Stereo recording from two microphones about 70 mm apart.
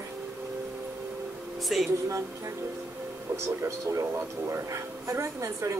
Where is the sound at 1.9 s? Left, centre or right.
Right.